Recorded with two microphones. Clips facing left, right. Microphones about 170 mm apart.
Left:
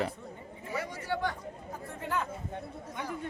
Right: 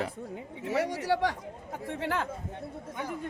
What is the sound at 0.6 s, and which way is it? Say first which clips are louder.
Speech: right 8 dB; 75° right (ahead or behind).